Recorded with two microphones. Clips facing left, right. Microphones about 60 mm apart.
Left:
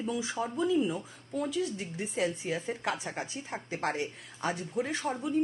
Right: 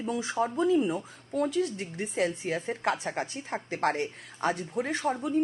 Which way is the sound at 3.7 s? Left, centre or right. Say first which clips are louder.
Right 4 dB; right.